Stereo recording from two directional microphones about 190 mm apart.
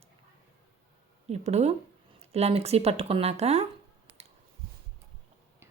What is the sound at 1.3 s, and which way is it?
Speech, 35° right (ahead or behind).